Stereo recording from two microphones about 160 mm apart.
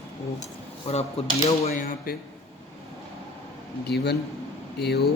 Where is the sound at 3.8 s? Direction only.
90° left.